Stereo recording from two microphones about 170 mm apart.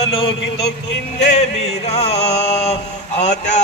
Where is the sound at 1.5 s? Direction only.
40° left (ahead or behind).